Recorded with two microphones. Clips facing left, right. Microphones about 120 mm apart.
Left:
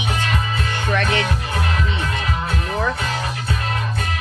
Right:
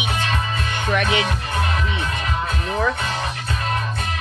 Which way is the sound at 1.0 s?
25° right (ahead or behind).